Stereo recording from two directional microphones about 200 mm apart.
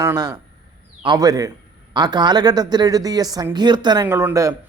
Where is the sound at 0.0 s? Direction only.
15° right (ahead or behind).